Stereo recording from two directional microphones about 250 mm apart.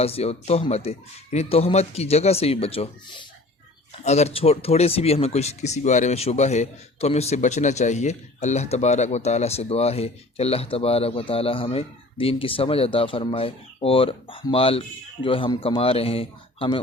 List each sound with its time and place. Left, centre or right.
0.0 s speech: left